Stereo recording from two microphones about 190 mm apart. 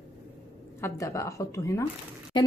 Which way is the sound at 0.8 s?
15° left (ahead or behind).